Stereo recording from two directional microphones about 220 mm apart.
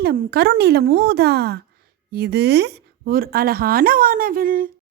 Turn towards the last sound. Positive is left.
turn(degrees=-40)  # may be behind; listen again after turning